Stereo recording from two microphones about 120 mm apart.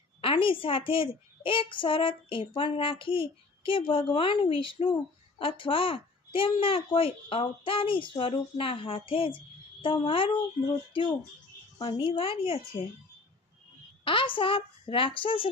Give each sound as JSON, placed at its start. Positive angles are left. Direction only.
{"t": 0.2, "sound": "a child's voice", "side_deg": 50}
{"t": 11.8, "sound": "a child's voice", "side_deg": 45}
{"t": 14.0, "sound": "a child's voice", "side_deg": 45}